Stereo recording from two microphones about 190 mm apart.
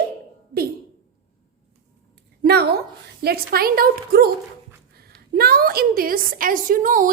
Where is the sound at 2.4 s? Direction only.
60° right (ahead or behind).